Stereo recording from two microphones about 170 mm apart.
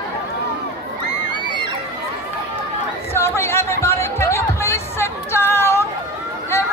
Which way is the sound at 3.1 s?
15° left (ahead or behind).